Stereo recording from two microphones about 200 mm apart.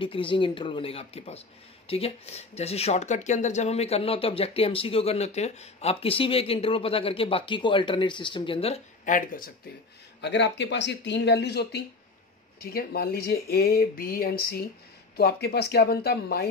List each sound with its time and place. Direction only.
0.0 s speech: 25° left (ahead or behind); by 9.5 s 40° left (ahead or behind)
10.2 s speech: 60° left (ahead or behind)